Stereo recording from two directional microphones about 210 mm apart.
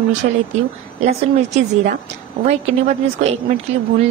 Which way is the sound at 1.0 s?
35° right (ahead or behind).